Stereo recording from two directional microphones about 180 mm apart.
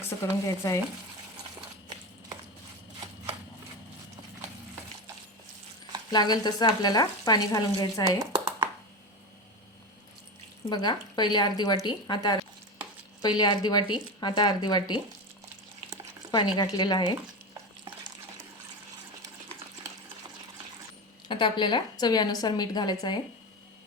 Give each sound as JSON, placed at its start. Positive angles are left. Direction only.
{"t": 0.0, "sound": "speech", "side_deg": 15}
{"t": 6.1, "sound": "a woman's voice", "side_deg": 25}
{"t": 8.2, "sound": "a sound", "side_deg": -20}
{"t": 10.7, "sound": "a woman's voice", "side_deg": 25}
{"t": 16.3, "sound": "a woman's voice", "side_deg": 25}
{"t": 21.2, "sound": "a woman's voice", "side_deg": 25}